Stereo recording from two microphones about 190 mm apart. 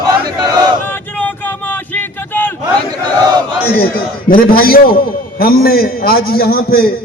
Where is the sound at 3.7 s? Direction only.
50° left (ahead or behind).